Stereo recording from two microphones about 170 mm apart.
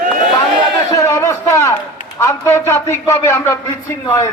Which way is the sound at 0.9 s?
20° left (ahead or behind).